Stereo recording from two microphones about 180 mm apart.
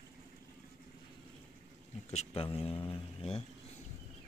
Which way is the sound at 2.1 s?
30° left (ahead or behind).